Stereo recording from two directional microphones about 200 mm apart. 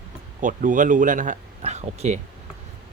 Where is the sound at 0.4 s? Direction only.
40° right (ahead or behind).